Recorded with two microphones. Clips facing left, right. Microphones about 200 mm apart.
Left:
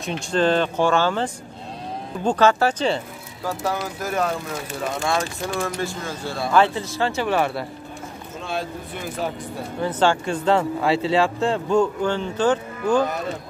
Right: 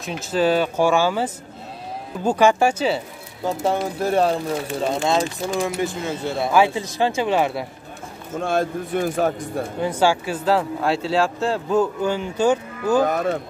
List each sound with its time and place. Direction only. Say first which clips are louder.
0.0 s speech: even; 5° right (ahead or behind)
3.4 s speech: right 4 dB; 25° right (ahead or behind)
8.4 s speech: right 7 dB; 50° right (ahead or behind)
9.8 s speech: even; 10° right (ahead or behind)
13.0 s speech: right 4 dB; 50° right (ahead or behind)